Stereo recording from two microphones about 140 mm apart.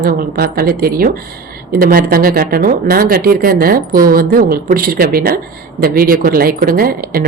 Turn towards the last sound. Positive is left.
turn(degrees=-90)